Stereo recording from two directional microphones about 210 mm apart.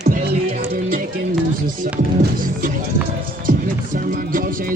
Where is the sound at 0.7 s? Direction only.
40° right (ahead or behind).